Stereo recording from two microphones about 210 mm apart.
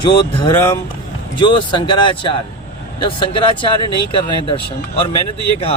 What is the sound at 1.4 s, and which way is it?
Speech, 20° left (ahead or behind).